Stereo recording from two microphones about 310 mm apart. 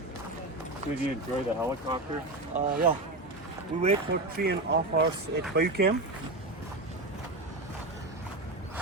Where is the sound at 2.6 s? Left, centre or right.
Right.